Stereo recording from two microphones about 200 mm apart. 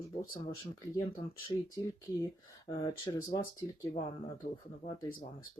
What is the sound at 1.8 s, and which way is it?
Speech, 15° left (ahead or behind).